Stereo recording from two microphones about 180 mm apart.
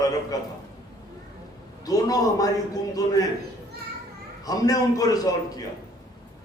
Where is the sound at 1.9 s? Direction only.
20° left (ahead or behind).